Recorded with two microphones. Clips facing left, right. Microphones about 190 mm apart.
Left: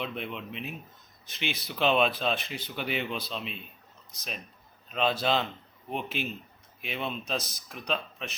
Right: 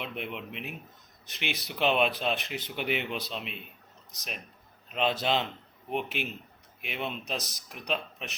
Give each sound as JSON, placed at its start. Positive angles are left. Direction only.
{"t": 0.0, "sound": "speech", "side_deg": -15}
{"t": 4.9, "sound": "a man's voice", "side_deg": -20}